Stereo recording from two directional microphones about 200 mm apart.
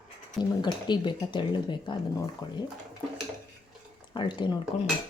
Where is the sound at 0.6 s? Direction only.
20° left (ahead or behind).